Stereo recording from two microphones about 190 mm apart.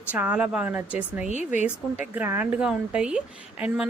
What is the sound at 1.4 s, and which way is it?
Speech, 40° left (ahead or behind).